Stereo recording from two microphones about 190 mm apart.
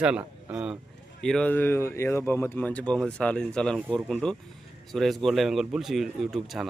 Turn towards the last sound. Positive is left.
turn(degrees=0)  # may be behind; listen again after turning